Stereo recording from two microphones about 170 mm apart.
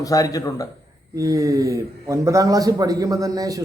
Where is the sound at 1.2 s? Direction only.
20° right (ahead or behind).